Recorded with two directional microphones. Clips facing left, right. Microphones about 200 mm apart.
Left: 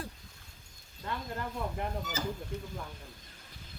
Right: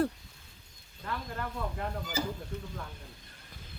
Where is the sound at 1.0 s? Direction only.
20° left (ahead or behind).